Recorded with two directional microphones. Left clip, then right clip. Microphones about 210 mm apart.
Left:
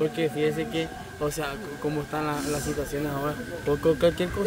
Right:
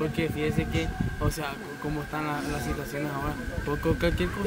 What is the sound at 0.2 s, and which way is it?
Speech, 10° left (ahead or behind).